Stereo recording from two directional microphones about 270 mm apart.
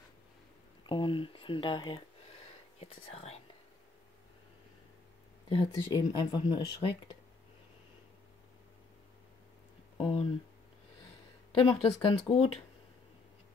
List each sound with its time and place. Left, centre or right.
0.8 s a sound: centre
2.8 s speech: left
5.5 s speech: centre
9.9 s speech: left
11.8 s speech: left